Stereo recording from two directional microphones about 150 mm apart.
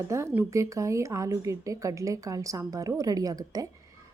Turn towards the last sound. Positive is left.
turn(degrees=-25)  # may be behind; listen again after turning